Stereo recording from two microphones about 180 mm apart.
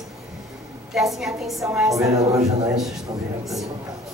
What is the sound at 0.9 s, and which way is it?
Speech, centre (ahead or behind).